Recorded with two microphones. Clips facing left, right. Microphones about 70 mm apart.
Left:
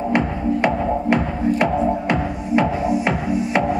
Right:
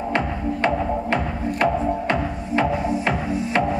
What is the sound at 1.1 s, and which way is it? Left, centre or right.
Music, centre.